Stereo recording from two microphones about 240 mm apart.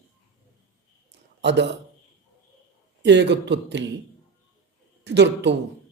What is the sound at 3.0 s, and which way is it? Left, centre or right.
Speech, right.